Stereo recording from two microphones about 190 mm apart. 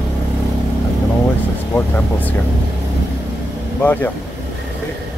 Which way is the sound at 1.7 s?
10° left (ahead or behind).